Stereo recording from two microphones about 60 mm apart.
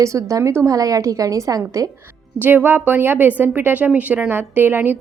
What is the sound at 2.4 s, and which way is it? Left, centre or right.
A woman's voice, right.